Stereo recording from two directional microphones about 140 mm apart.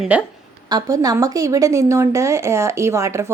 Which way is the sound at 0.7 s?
25° right (ahead or behind).